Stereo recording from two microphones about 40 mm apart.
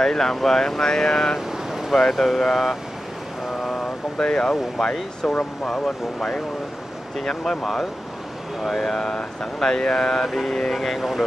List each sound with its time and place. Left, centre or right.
0.0 s speech: centre
4.2 s speech: centre